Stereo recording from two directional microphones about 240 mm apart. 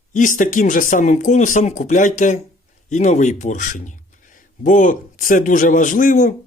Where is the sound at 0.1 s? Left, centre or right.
Left.